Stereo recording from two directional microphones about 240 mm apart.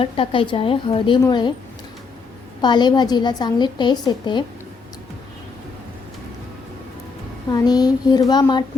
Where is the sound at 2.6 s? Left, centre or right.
Centre.